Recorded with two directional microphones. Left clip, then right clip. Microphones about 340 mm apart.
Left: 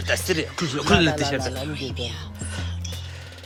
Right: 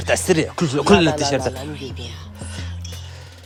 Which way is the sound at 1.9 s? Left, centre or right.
Left.